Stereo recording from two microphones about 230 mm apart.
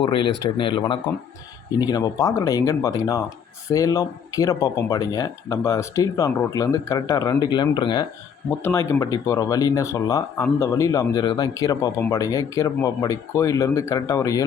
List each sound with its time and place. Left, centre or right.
0.0 s speech: left